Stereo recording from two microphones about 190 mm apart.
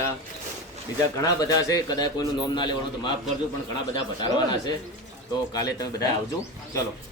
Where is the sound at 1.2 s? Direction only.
20° left (ahead or behind).